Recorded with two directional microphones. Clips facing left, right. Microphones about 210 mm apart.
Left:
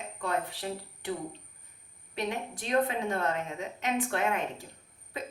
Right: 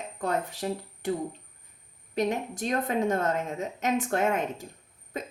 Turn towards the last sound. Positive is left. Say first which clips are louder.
# right 3 dB
turn(degrees=-45)  # may be behind; listen again after turning